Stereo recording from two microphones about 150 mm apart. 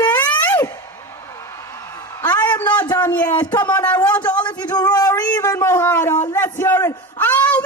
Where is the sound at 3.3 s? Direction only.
30° left (ahead or behind).